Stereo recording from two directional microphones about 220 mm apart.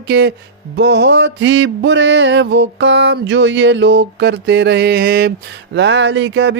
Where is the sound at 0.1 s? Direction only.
50° right (ahead or behind).